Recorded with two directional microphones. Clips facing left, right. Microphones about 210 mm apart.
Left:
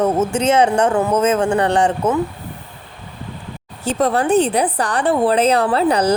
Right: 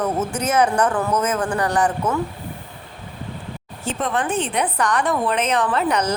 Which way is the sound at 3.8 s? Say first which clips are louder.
Left 6 dB; 35° left (ahead or behind).